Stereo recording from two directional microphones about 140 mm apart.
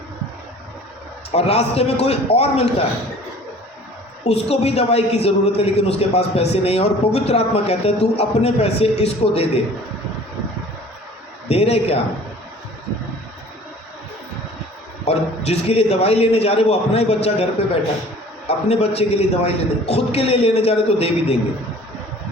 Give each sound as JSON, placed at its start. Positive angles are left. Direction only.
{"t": 1.3, "sound": "a woman's voice", "side_deg": 50}
{"t": 4.2, "sound": "a woman's voice", "side_deg": 50}
{"t": 11.4, "sound": "a woman's voice", "side_deg": 45}
{"t": 15.0, "sound": "a woman's voice", "side_deg": 50}
{"t": 18.4, "sound": "a woman's voice", "side_deg": 50}